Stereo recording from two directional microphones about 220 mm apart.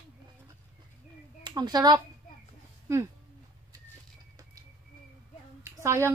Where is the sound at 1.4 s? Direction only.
20° right (ahead or behind).